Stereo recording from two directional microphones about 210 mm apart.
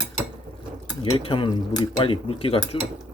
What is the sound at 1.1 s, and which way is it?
Speech, 25° left (ahead or behind).